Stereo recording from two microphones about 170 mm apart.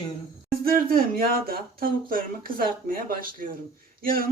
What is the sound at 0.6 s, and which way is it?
Speech, 60° right (ahead or behind).